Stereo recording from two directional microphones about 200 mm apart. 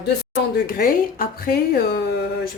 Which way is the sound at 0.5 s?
45° left (ahead or behind).